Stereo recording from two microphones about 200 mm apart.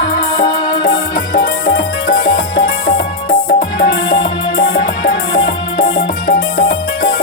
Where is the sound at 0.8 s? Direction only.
50° left (ahead or behind).